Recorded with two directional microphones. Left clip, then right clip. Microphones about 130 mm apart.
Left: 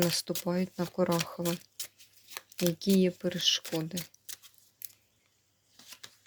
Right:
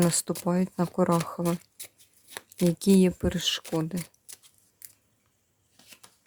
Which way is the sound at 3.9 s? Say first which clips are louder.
Right 2 dB; 15° right (ahead or behind).